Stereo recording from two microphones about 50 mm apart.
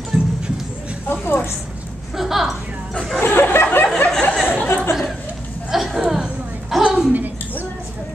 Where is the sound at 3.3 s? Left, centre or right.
Left.